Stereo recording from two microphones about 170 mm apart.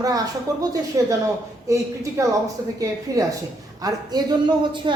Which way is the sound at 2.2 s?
20° right (ahead or behind).